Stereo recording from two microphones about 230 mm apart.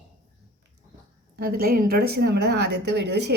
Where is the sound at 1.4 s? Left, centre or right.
Right.